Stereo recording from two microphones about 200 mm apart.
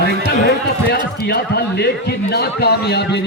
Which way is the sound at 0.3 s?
55° left (ahead or behind).